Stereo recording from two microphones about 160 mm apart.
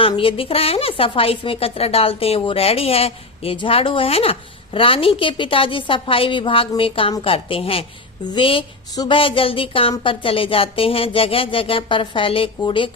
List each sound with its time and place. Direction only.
0.0 s a woman's voice: 35° left (ahead or behind)